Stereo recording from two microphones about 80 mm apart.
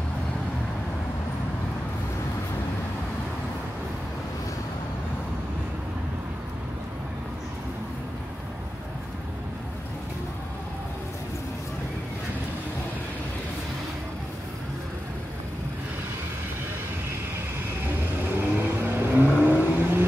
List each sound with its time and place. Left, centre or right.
18.4 s vehicle: right